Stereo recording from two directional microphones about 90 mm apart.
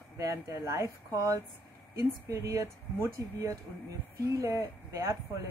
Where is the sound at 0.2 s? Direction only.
35° right (ahead or behind).